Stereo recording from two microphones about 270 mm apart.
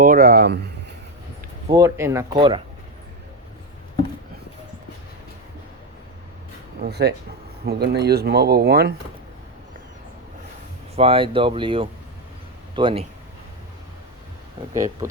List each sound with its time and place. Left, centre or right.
0.0 s speech: right
1.7 s speech: centre
6.8 s speech: right
10.9 s speech: right